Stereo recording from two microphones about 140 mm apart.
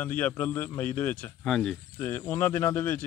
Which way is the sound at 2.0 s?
15° left (ahead or behind).